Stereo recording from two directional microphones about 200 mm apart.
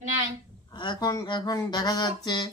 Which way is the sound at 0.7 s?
25° left (ahead or behind).